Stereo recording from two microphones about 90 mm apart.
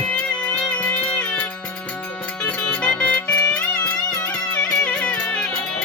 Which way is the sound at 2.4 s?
15° left (ahead or behind).